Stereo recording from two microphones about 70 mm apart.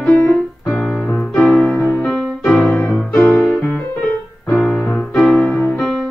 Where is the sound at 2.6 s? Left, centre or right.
Left.